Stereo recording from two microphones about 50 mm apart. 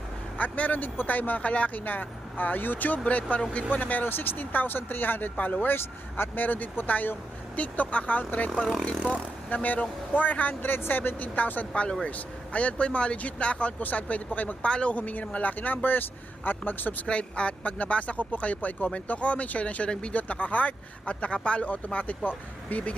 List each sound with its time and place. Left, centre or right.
0.3 s speech: left
9.6 s speech: left
11.7 s speech: centre
14.6 s speech: left
17.1 s speech: left